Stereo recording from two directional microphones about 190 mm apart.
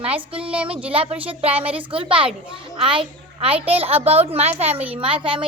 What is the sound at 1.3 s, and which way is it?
A woman's voice, 30° right (ahead or behind).